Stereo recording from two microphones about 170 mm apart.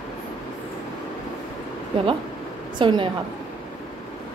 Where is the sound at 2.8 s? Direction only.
30° right (ahead or behind).